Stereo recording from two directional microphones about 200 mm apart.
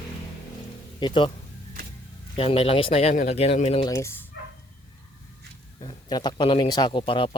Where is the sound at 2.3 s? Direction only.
30° left (ahead or behind).